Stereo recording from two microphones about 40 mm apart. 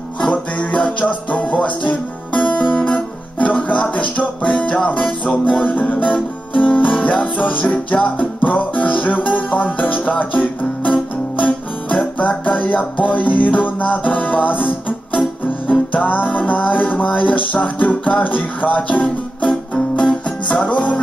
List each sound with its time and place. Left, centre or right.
0.3 s music: left
6.1 s music: left